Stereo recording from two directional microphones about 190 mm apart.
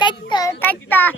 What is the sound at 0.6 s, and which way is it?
Speech, 10° left (ahead or behind).